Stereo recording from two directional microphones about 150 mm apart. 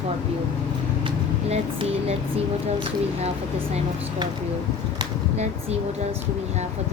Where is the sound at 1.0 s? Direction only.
40° right (ahead or behind).